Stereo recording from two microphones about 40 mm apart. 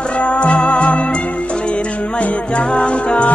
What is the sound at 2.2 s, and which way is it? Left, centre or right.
Music, left.